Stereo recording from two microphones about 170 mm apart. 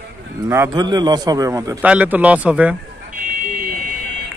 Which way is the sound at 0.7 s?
25° right (ahead or behind).